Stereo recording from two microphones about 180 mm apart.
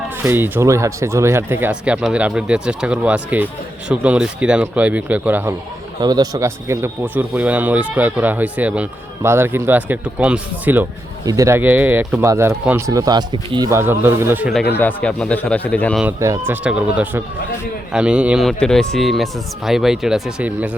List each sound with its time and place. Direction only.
0.2 s speech: 15° right (ahead or behind)
6.0 s speech: 20° right (ahead or behind)
13.7 s speech: 15° right (ahead or behind)
14.7 s a man's voice: 10° left (ahead or behind)
16.2 s speech: 15° right (ahead or behind)
16.6 s speech: 5° right (ahead or behind)